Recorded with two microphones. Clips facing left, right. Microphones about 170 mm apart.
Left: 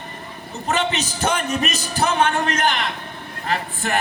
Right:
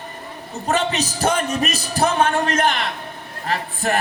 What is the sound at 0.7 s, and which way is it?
A man's voice, 35° right (ahead or behind).